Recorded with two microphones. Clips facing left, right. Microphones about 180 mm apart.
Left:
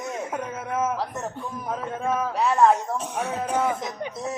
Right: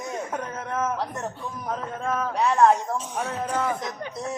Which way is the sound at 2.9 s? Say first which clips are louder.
Left 1 dB; 60° left (ahead or behind).